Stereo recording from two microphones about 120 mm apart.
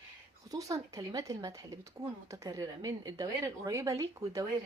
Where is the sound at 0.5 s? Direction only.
30° right (ahead or behind).